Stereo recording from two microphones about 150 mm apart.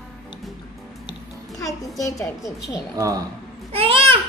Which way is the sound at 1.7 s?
20° left (ahead or behind).